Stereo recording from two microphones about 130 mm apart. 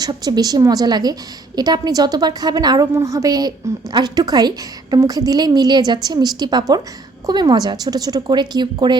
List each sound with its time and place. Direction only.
0.0 s a woman's voice: 30° right (ahead or behind)